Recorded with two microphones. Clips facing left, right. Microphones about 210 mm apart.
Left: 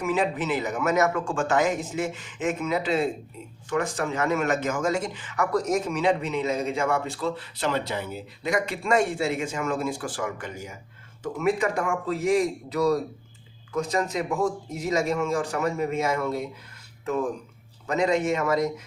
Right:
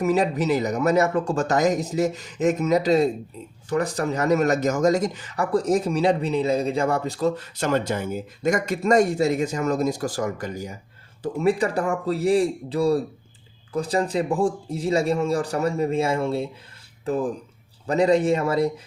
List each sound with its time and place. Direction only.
0.0 s speech: 40° right (ahead or behind)